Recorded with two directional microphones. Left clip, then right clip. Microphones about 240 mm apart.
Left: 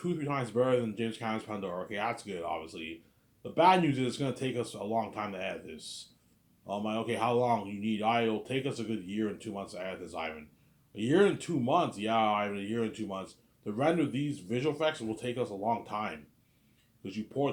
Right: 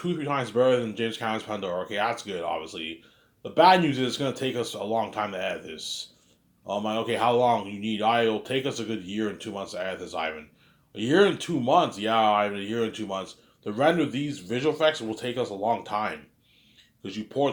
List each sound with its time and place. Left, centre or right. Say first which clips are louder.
0.0 s speech: right 6 dB; centre